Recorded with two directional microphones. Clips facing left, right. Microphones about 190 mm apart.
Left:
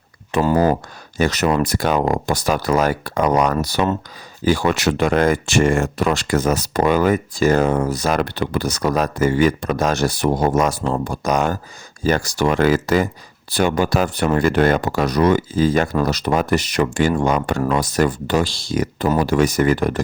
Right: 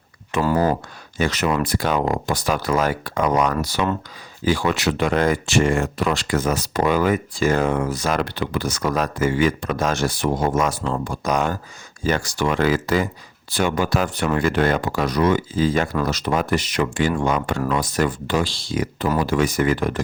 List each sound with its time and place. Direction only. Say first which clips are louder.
0.4 s speech: left 3 dB; 20° left (ahead or behind)
1.2 s speech: left 3 dB; 40° left (ahead or behind)